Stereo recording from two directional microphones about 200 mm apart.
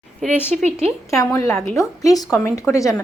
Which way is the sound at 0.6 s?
30° right (ahead or behind).